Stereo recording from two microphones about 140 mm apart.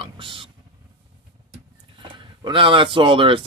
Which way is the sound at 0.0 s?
40° right (ahead or behind).